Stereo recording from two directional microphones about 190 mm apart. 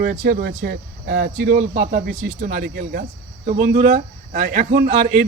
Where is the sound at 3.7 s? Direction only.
35° right (ahead or behind).